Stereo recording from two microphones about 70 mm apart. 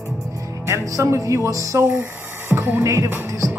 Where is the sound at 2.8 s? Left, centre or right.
Right.